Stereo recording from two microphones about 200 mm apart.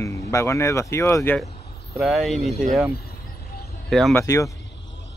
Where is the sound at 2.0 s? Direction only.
Centre (ahead or behind).